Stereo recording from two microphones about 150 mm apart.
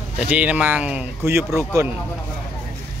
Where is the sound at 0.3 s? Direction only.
10° right (ahead or behind).